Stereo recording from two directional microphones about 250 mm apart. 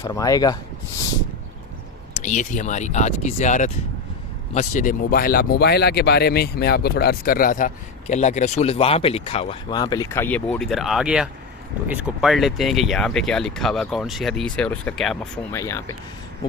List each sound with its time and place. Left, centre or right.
0.0 s speech: centre
2.1 s speech: left; by 15.2 s centre
15.5 s speech: centre